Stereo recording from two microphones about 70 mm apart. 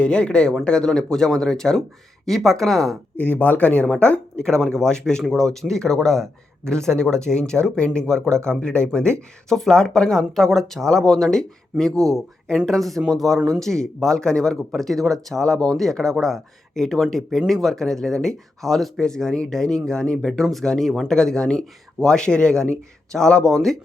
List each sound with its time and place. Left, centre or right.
0.0 s speech: centre
3.2 s speech: left; by 23.7 s centre